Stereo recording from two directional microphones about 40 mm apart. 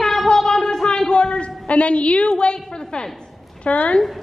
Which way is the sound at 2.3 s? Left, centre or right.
Left.